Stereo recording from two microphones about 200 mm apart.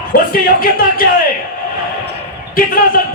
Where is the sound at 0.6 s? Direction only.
45° left (ahead or behind).